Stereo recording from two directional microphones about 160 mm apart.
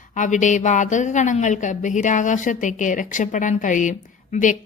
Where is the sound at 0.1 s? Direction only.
50° left (ahead or behind).